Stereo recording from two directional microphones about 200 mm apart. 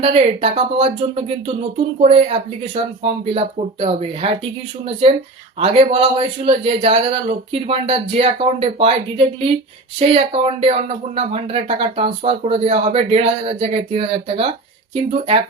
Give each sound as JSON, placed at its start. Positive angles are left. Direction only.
{"t": 0.0, "sound": "speech", "side_deg": -30}
{"t": 2.0, "sound": "speech", "side_deg": -30}
{"t": 5.5, "sound": "speech", "side_deg": -30}